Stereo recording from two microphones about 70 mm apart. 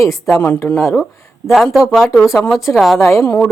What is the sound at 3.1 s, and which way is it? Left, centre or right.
Speech, left.